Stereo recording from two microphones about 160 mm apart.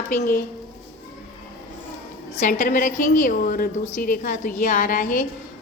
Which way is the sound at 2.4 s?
60° left (ahead or behind).